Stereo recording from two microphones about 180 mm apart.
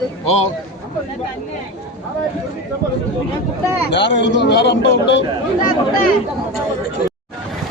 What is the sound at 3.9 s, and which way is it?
A man's voice, 75° left (ahead or behind).